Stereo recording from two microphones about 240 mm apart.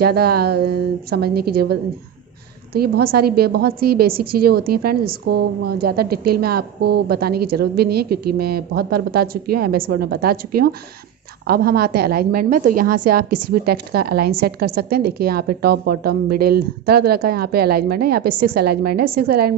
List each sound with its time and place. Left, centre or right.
0.0 s a woman's voice: right